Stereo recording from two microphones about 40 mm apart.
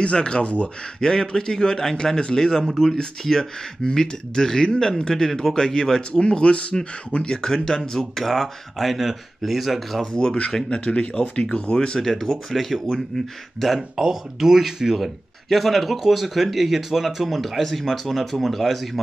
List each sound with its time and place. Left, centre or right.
0.0 s speech: left
1.0 s speech: centre
8.2 s speech: centre
10.1 s speech: left
12.0 s speech: centre
13.9 s speech: centre
15.5 s speech: centre